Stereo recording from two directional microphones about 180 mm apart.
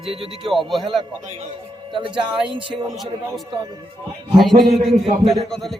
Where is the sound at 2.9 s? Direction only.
Centre (ahead or behind).